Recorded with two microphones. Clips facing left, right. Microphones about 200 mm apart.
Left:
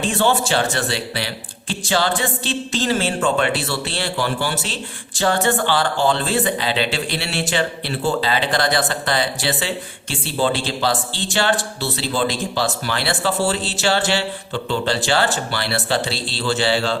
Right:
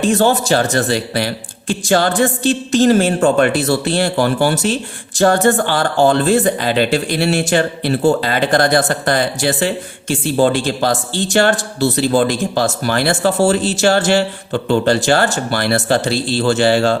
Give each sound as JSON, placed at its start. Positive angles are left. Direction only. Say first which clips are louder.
{"t": 0.0, "sound": "speech", "louder": "right 5 dB", "side_deg": -40}